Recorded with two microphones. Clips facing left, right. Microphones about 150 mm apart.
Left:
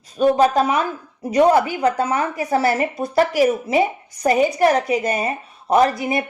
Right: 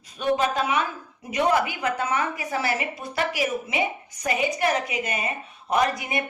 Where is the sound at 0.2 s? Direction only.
40° left (ahead or behind).